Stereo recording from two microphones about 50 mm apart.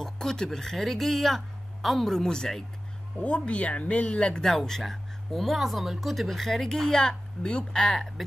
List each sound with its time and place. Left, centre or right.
0.0 s speech: centre
3.2 s speech: left; by 8.1 s centre